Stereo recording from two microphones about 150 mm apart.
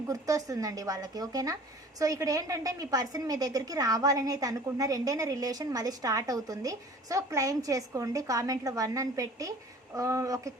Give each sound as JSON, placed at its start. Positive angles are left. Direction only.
{"t": 0.1, "sound": "a woman's voice", "side_deg": -20}